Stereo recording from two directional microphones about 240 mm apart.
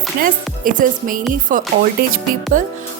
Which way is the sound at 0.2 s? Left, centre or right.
Right.